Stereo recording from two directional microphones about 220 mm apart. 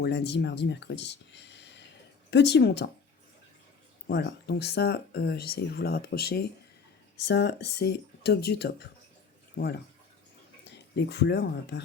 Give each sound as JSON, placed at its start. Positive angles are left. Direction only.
{"t": 0.0, "sound": "speech", "side_deg": 50}
{"t": 4.1, "sound": "speech", "side_deg": 50}